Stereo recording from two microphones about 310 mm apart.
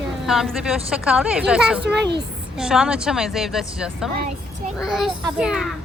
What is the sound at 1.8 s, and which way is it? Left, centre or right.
Speech, right.